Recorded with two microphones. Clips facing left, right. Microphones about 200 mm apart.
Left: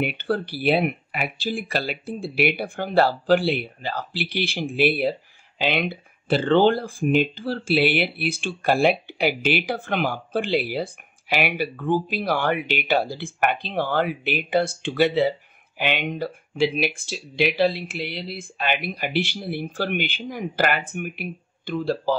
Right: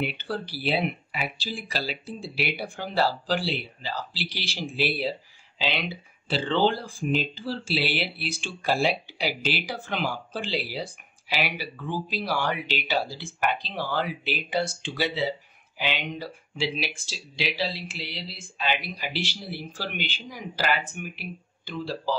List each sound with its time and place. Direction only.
0.0 s speech: 55° left (ahead or behind)